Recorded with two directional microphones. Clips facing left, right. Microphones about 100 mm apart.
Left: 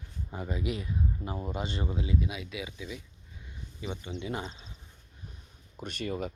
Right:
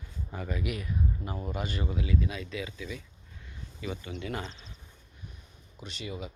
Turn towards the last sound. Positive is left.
turn(degrees=50)  # may be behind; listen again after turning